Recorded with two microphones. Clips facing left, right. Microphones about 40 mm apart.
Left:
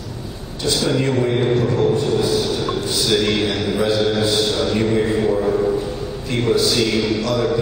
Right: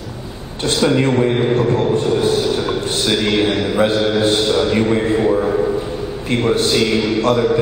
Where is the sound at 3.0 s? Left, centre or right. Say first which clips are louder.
Right 2 dB; centre.